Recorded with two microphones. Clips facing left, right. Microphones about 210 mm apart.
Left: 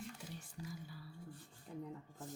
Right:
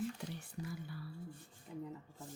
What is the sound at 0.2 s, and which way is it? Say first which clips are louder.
Whispering: right 5 dB; 65° right (ahead or behind).